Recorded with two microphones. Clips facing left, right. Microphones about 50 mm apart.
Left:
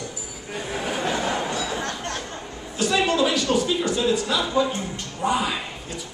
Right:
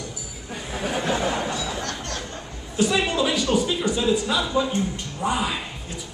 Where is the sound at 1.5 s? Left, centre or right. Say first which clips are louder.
Left 1 dB; left.